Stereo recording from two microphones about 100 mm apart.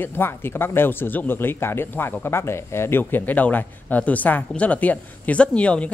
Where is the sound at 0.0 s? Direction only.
20° left (ahead or behind).